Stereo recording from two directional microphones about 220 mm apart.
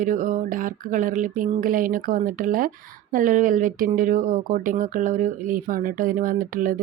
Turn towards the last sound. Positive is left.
turn(degrees=-40)  # may be behind; listen again after turning